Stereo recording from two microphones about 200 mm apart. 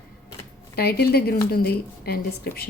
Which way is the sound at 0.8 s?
50° left (ahead or behind).